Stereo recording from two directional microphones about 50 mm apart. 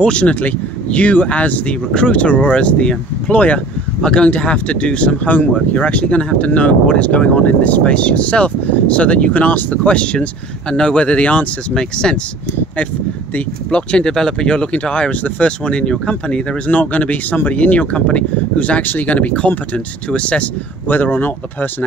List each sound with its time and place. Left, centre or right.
0.0 s speech: left
9.8 s speech: left
11.7 s speech: centre
13.7 s speech: centre
18.8 s speech: left
20.9 s speech: left